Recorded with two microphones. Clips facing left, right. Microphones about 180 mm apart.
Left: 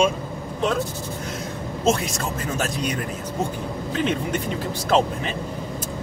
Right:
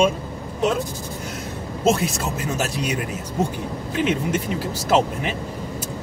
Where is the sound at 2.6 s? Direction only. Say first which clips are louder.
Even; 5° right (ahead or behind).